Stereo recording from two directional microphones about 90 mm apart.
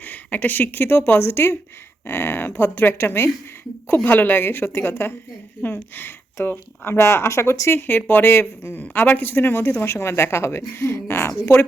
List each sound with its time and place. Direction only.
0.0 s speech: 20° left (ahead or behind)